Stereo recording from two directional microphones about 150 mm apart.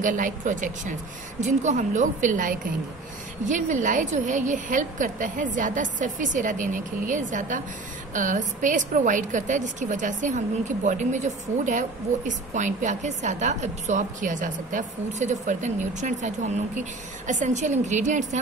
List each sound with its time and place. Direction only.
0.0 s a woman's voice: 60° right (ahead or behind)